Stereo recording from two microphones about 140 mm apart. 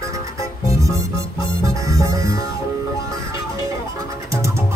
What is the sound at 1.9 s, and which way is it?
Music, 25° right (ahead or behind).